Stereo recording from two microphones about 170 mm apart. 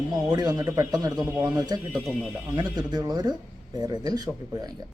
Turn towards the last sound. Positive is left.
turn(degrees=-25)  # may be behind; listen again after turning